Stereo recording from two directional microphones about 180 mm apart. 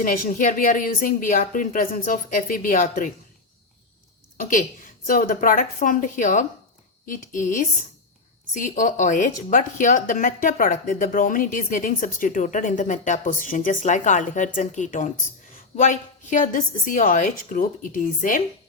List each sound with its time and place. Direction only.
0.0 s speech: 50° left (ahead or behind)
4.4 s a woman's voice: 50° left (ahead or behind)